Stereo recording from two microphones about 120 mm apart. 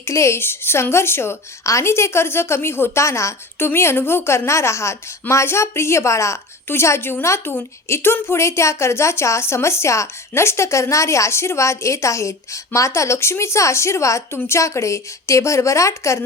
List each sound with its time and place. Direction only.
0.0 s a woman's voice: 25° left (ahead or behind)